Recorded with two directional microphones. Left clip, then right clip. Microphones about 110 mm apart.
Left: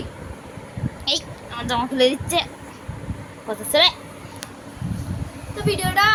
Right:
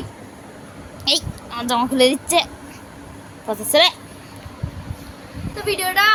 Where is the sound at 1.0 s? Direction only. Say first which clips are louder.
Right 4 dB; 65° right (ahead or behind).